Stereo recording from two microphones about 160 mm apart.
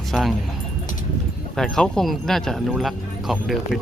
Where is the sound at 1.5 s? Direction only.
5° left (ahead or behind).